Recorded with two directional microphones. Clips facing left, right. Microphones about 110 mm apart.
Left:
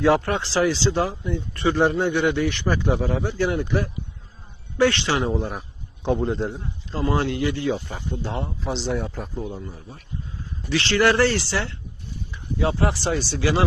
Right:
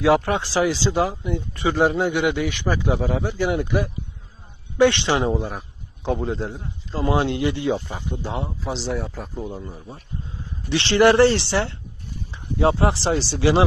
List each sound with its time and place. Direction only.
0.3 s speech: 15° right (ahead or behind)
4.8 s speech: 25° right (ahead or behind)
5.3 s a man's voice: centre (ahead or behind)
7.1 s speech: 20° right (ahead or behind)
8.1 s speech: 10° right (ahead or behind)
9.5 s speech: 15° right (ahead or behind)